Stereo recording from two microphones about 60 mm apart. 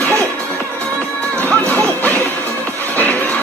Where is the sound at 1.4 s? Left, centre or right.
Left.